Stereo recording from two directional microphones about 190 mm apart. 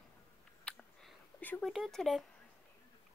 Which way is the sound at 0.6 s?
5° left (ahead or behind).